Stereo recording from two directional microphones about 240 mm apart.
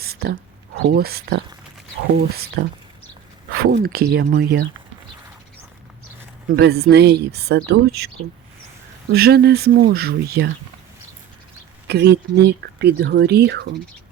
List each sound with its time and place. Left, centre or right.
0.0 s a sound: right
0.8 s speech: right
6.5 s speech: right
9.1 s speech: right
11.9 s speech: right